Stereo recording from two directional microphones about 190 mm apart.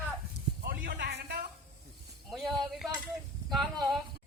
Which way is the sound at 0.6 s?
55° right (ahead or behind).